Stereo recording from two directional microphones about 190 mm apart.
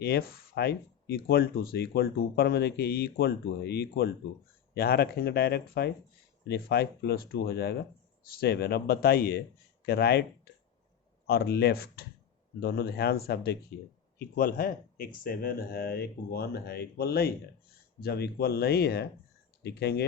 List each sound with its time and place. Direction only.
0.0 s speech: 55° left (ahead or behind)